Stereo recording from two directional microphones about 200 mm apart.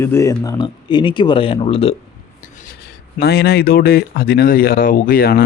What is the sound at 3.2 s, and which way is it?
A man's voice, 50° left (ahead or behind).